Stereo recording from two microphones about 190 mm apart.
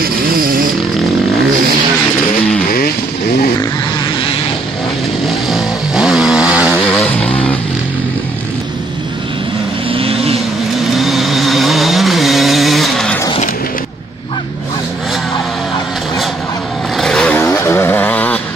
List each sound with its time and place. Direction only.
0.0 s a sound: 50° right (ahead or behind)
5.5 s chainsaw: centre (ahead or behind)
6.8 s music: 10° left (ahead or behind)
9.8 s vehicle: 30° right (ahead or behind)
11.0 s vehicle: centre (ahead or behind)
16.9 s vehicle: centre (ahead or behind)